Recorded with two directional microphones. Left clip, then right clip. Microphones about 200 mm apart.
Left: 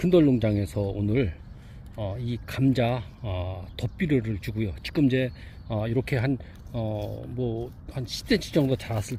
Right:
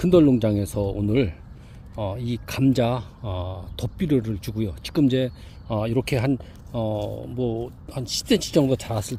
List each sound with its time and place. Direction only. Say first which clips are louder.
0.0 s speech: right 4 dB; 15° right (ahead or behind)